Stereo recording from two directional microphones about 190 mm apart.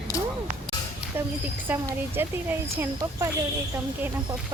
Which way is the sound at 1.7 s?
10° right (ahead or behind).